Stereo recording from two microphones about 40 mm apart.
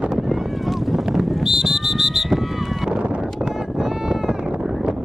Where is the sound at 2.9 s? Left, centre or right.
Right.